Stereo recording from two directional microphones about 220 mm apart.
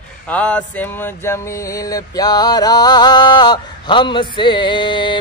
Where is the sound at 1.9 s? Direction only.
15° left (ahead or behind).